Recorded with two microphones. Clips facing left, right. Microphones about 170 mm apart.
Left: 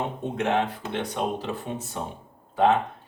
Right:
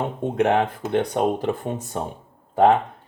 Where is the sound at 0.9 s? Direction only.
50° right (ahead or behind).